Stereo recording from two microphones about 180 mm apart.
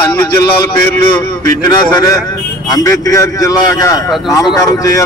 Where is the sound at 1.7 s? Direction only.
20° left (ahead or behind).